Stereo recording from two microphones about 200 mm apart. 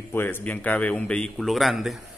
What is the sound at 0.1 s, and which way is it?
A man's voice, 10° left (ahead or behind).